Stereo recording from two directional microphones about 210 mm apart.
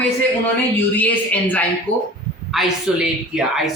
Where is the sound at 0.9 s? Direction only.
10° left (ahead or behind).